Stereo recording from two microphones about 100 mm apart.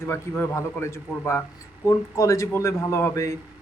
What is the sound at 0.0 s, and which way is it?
A man's voice, 25° left (ahead or behind).